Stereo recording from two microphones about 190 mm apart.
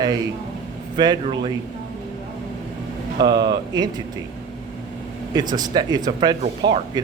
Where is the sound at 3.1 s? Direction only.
25° right (ahead or behind).